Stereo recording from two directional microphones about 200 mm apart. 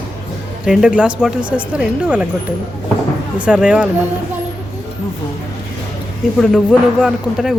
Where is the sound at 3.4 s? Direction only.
5° right (ahead or behind).